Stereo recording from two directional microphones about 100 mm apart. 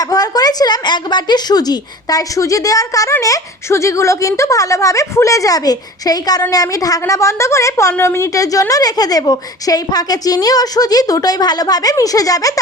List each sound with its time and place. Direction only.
0.0 s a woman's voice: 40° left (ahead or behind)